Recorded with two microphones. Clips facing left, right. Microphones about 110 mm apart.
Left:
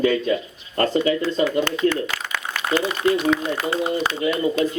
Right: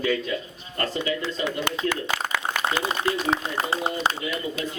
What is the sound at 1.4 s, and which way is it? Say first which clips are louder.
Speech: left 8 dB; 35° left (ahead or behind).